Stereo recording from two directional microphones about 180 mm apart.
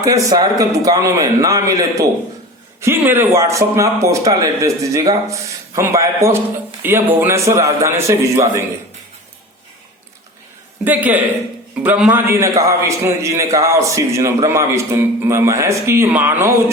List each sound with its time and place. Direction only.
0.0 s a man's voice: 20° right (ahead or behind)
10.8 s speech: 10° right (ahead or behind)